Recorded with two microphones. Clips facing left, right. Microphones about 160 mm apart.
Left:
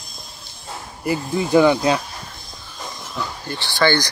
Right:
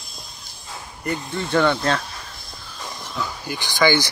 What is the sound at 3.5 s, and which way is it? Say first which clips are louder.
Speech: even; 15° right (ahead or behind).